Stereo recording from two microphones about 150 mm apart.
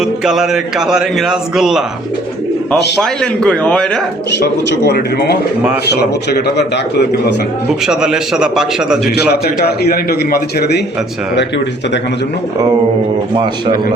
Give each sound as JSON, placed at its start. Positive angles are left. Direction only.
{"t": 0.0, "sound": "a man's voice", "side_deg": -5}
{"t": 3.0, "sound": "a man's voice", "side_deg": 5}
{"t": 4.4, "sound": "a man's voice", "side_deg": 90}
{"t": 7.9, "sound": "a man's voice", "side_deg": -5}
{"t": 9.1, "sound": "a man's voice", "side_deg": 90}